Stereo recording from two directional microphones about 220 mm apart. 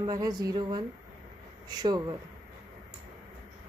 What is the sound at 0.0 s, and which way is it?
Speech, 20° right (ahead or behind).